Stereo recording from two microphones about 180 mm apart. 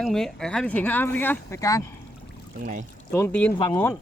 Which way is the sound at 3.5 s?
25° left (ahead or behind).